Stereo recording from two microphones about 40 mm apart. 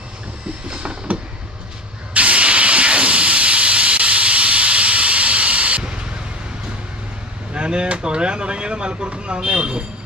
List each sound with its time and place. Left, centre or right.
1.1 s vehicle: right
2.1 s hiss: right
7.5 s a sound: right
9.4 s speech: right